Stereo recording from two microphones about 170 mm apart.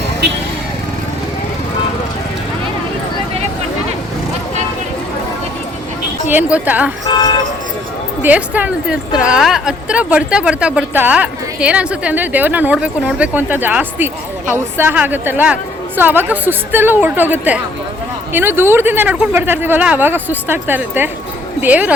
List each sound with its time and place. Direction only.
6.2 s a woman's voice: 10° right (ahead or behind)
7.1 s vehicle: 25° left (ahead or behind)
8.2 s a woman's voice: 10° right (ahead or behind)